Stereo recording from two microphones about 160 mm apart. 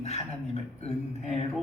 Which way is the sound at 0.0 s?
45° left (ahead or behind).